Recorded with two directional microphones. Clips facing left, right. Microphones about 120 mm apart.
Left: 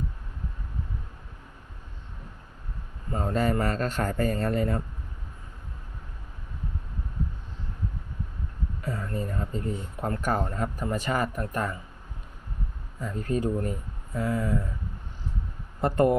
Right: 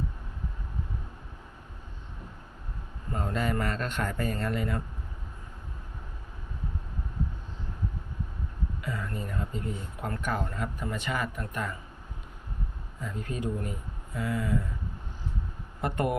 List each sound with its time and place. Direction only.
3.2 s a man's voice: 40° left (ahead or behind)
8.8 s speech: 40° left (ahead or behind)
13.0 s a man's voice: 40° left (ahead or behind)
15.8 s a man's voice: 35° left (ahead or behind)